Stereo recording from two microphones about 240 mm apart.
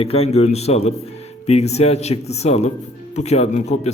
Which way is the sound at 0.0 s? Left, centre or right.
Left.